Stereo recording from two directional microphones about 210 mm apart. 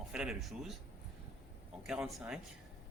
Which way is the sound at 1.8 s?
5° right (ahead or behind).